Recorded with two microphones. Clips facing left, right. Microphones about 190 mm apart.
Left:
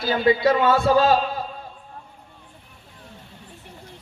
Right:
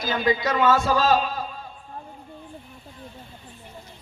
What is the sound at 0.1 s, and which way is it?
Speech, 30° left (ahead or behind).